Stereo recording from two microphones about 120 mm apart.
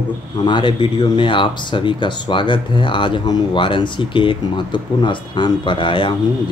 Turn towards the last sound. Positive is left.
turn(degrees=45)  # may be behind; listen again after turning